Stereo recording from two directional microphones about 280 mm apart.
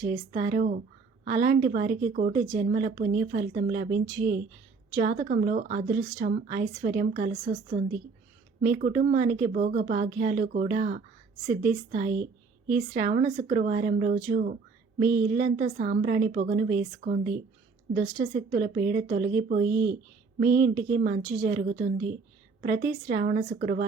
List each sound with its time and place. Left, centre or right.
0.0 s a woman's voice: right